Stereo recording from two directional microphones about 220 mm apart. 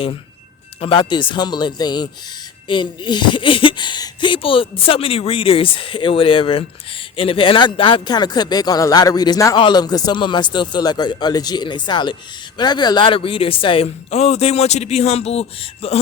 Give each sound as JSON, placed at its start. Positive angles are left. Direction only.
{"t": 0.8, "sound": "speech", "side_deg": 20}